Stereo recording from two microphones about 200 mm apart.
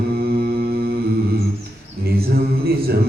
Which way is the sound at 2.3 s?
50° right (ahead or behind).